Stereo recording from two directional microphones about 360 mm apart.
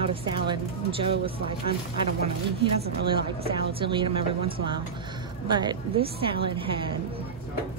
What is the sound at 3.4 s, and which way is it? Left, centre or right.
A woman's voice, centre.